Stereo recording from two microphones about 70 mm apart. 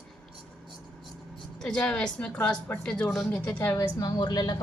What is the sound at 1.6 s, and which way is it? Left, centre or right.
Speech, centre.